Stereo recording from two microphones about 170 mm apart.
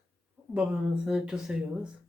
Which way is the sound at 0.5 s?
5° right (ahead or behind).